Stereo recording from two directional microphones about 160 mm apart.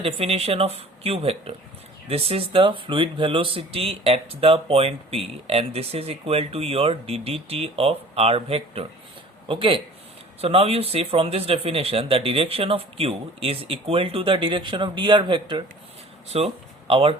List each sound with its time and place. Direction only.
0.0 s speech: 40° right (ahead or behind)